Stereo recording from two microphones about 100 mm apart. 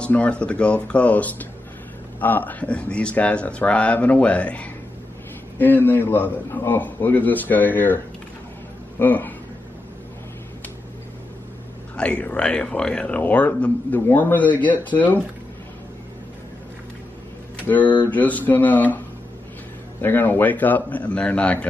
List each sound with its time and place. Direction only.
0.0 s a man's voice: 10° left (ahead or behind)
12.0 s a man's voice: 10° left (ahead or behind)
17.6 s a man's voice: 15° left (ahead or behind)
20.0 s a man's voice: 20° left (ahead or behind)